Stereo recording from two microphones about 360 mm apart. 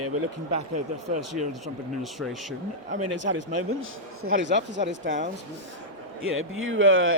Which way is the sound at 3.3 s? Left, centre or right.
Right.